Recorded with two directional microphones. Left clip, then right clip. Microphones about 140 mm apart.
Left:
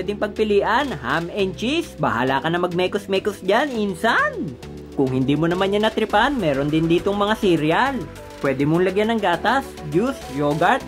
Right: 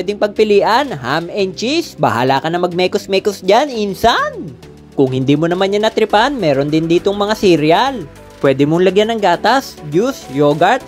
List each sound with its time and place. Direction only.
0.0 s speech: 35° right (ahead or behind)